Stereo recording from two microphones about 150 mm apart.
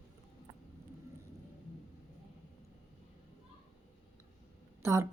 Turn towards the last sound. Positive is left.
turn(degrees=-20)  # may be behind; listen again after turning